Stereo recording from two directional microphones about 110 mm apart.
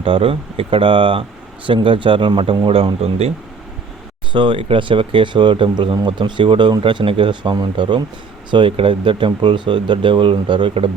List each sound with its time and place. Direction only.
0.0 s speech: 55° right (ahead or behind)
4.3 s speech: 45° right (ahead or behind)